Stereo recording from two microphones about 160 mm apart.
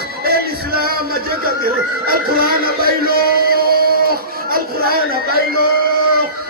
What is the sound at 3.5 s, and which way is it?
Music, 70° right (ahead or behind).